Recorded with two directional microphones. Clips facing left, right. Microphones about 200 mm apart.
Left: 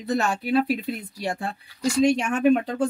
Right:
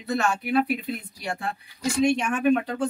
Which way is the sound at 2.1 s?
35° left (ahead or behind).